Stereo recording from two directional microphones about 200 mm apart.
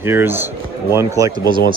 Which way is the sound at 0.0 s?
10° right (ahead or behind).